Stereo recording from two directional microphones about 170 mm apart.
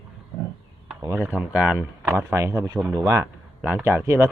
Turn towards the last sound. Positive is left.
turn(degrees=-15)  # may be behind; listen again after turning